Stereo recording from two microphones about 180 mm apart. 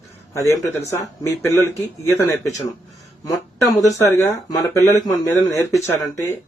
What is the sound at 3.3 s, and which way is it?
Speech, 20° left (ahead or behind).